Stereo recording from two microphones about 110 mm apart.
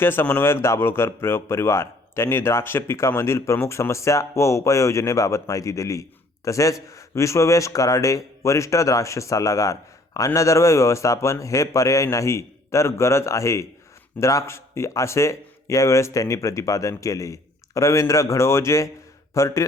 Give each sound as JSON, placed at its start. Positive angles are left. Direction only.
{"t": 0.0, "sound": "speech", "side_deg": 20}